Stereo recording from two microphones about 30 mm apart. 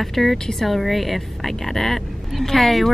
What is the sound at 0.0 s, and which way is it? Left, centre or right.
Speech, centre.